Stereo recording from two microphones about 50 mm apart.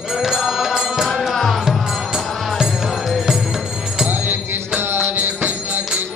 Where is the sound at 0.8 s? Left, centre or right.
Centre.